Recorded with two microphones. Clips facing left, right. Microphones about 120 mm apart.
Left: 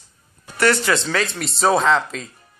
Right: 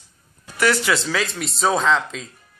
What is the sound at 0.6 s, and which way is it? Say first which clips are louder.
Speech: left 1 dB; centre (ahead or behind).